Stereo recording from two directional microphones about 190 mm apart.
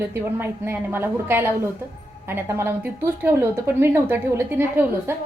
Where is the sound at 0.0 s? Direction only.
10° right (ahead or behind).